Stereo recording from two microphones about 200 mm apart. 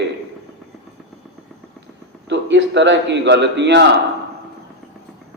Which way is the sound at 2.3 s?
60° right (ahead or behind).